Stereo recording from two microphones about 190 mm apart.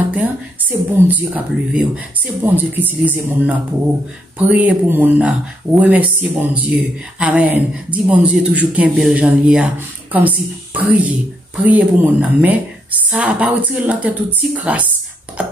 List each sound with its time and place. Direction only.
0.1 s a woman's voice: 10° right (ahead or behind)